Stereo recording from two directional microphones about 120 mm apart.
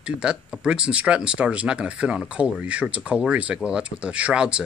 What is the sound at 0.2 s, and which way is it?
Speech, 10° right (ahead or behind).